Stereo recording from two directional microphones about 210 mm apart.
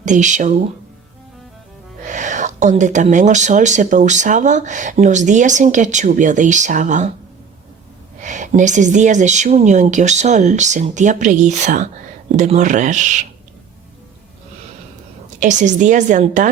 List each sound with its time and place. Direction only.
0.0 s speech: 35° right (ahead or behind)
2.0 s speech: 35° right (ahead or behind)
8.2 s speech: 35° right (ahead or behind)
15.4 s speech: 35° right (ahead or behind)